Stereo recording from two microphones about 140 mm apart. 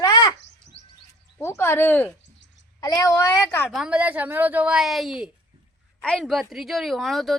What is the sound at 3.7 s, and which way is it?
Speech, 5° right (ahead or behind).